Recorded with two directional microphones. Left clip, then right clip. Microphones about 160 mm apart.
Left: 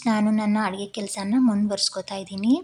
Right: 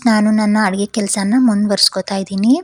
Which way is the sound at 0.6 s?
45° right (ahead or behind).